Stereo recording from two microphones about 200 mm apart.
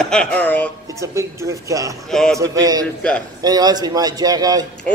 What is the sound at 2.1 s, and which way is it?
Speech, centre (ahead or behind).